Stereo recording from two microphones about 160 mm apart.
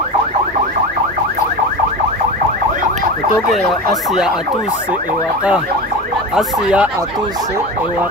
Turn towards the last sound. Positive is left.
turn(degrees=-5)  # may be behind; listen again after turning